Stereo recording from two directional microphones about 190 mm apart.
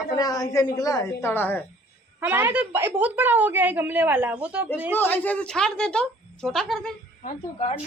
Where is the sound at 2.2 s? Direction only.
10° right (ahead or behind).